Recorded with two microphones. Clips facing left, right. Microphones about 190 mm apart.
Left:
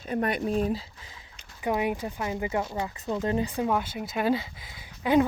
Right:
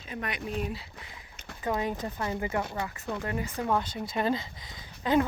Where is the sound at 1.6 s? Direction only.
15° left (ahead or behind).